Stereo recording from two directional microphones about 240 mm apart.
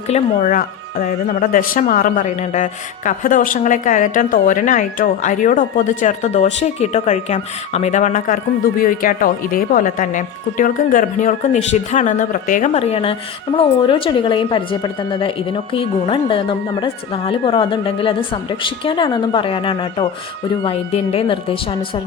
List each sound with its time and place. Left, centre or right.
0.1 s a woman's voice: left